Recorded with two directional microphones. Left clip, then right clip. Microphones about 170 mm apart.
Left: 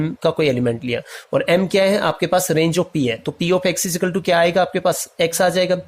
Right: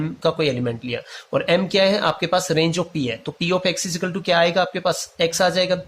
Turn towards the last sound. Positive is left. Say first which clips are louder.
# left 2 dB
turn(degrees=35)  # may be behind; listen again after turning